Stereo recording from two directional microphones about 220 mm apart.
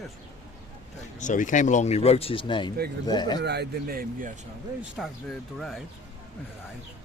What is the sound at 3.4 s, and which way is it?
Speech, 50° right (ahead or behind).